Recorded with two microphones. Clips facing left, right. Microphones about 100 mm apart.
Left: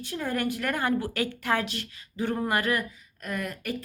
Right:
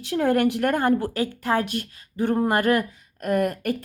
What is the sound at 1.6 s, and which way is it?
Speech, 50° right (ahead or behind).